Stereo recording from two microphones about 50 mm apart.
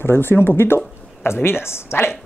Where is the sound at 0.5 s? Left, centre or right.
Left.